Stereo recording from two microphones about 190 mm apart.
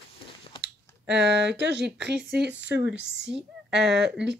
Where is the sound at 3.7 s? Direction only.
65° right (ahead or behind).